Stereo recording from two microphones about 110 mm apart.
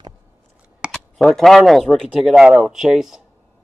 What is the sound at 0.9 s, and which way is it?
Speech, 5° left (ahead or behind).